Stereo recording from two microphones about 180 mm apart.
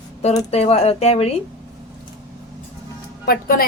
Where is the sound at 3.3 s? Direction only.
55° left (ahead or behind).